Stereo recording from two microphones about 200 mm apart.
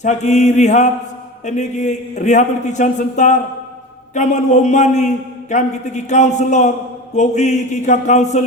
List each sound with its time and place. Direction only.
0.0 s a man's voice: 35° left (ahead or behind)